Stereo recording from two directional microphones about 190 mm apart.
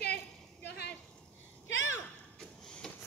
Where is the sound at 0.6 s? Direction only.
60° left (ahead or behind).